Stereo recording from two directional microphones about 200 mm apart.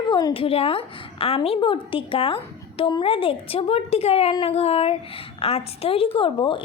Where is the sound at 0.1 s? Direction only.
20° left (ahead or behind).